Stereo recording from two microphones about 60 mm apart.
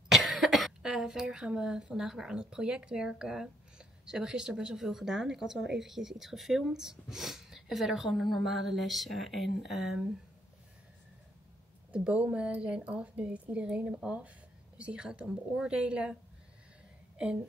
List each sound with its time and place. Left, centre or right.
0.1 s speech: centre
11.9 s a woman's voice: right